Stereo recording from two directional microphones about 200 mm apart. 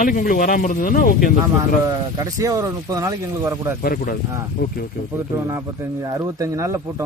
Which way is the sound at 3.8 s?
45° left (ahead or behind).